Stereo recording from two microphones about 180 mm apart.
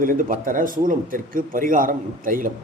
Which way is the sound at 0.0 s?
50° right (ahead or behind).